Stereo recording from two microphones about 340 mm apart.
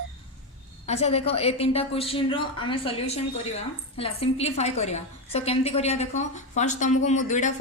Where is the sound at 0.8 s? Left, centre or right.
Centre.